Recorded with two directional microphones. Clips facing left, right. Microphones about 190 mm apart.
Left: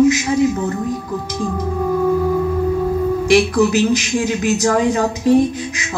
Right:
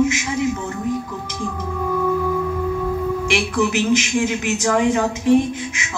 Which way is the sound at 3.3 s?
35° left (ahead or behind).